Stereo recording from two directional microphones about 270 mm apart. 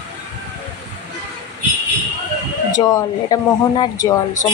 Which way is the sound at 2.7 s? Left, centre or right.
Centre.